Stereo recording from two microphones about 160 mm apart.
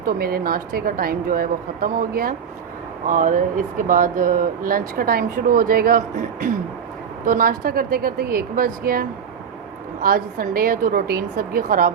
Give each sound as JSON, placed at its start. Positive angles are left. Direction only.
{"t": 0.0, "sound": "a woman's voice", "side_deg": -65}
{"t": 7.3, "sound": "a woman's voice", "side_deg": -60}